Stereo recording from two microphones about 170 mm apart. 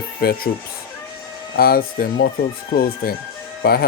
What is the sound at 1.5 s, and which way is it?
Speech, 60° left (ahead or behind).